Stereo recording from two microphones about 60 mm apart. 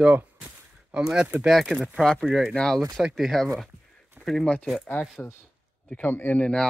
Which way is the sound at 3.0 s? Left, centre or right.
Centre.